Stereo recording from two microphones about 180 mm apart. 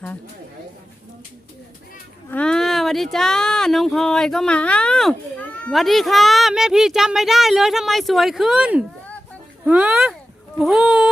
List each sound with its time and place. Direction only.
2.3 s speech: 5° left (ahead or behind)